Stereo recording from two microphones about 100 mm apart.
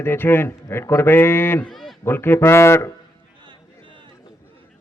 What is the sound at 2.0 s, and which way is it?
Speech, 25° left (ahead or behind).